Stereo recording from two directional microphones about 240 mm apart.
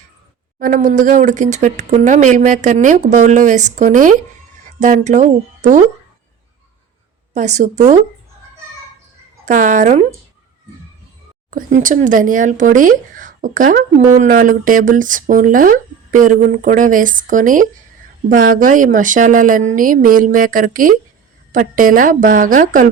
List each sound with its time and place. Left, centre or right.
0.6 s speech: right
7.3 s a woman's voice: right
9.5 s speech: right
11.5 s speech: right